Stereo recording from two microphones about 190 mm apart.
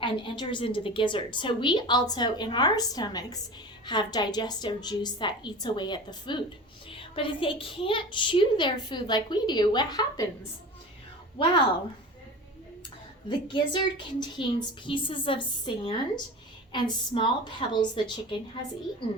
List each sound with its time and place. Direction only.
0.0 s a woman's voice: 25° left (ahead or behind)
11.3 s a woman's voice: 25° left (ahead or behind)
13.2 s a woman's voice: 25° left (ahead or behind)